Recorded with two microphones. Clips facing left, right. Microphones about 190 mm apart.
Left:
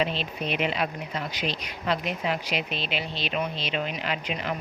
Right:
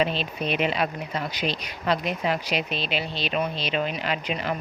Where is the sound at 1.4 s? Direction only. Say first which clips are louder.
Right 2 dB; 35° right (ahead or behind).